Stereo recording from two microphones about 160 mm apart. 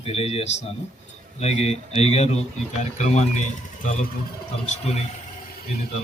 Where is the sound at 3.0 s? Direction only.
45° left (ahead or behind).